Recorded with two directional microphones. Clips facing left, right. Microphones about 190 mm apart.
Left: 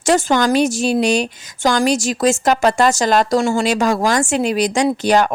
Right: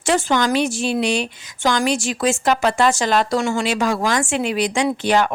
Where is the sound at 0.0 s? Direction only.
45° left (ahead or behind).